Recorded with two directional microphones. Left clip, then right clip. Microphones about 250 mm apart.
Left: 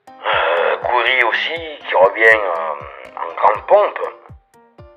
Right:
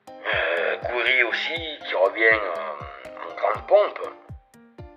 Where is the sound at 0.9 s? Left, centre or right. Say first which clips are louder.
Left 5 dB; left.